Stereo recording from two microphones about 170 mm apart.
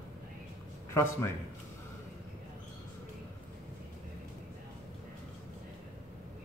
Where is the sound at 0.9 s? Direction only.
15° left (ahead or behind).